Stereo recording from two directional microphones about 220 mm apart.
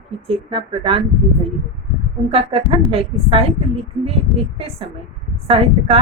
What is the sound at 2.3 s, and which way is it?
A woman's voice, 25° right (ahead or behind).